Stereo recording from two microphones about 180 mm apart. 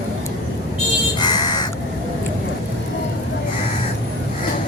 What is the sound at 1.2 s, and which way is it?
Crow, 25° left (ahead or behind).